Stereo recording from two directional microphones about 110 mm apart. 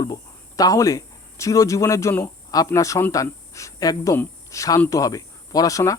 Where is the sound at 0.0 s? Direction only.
35° left (ahead or behind).